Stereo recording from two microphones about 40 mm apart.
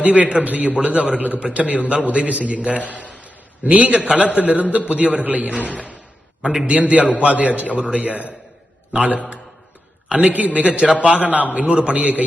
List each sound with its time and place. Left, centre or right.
0.0 s a man's voice: right
2.8 s a man's voice: left
3.1 s a sound: right
3.7 s a man's voice: right
6.4 s a man's voice: centre
6.7 s a man's voice: right